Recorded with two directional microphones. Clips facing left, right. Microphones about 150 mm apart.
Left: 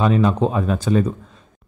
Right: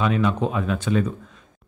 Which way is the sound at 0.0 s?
35° left (ahead or behind).